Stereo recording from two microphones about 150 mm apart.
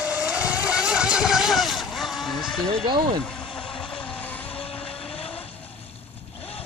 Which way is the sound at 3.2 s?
5° left (ahead or behind).